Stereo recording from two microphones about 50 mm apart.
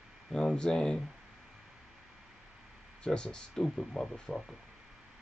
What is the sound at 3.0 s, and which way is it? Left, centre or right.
Speech, centre.